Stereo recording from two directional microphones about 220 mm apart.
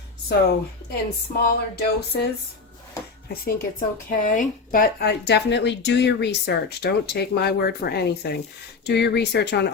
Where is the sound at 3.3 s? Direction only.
45° left (ahead or behind).